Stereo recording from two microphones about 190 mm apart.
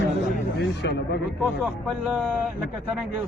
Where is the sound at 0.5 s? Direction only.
60° left (ahead or behind).